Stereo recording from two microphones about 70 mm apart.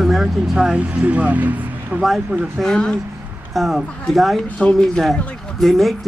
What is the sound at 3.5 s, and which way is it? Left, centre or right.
Speech, centre.